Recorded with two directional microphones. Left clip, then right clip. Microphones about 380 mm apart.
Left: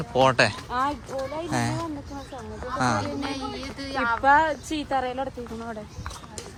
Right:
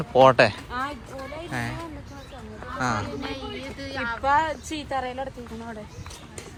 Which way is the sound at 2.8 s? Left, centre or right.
Centre.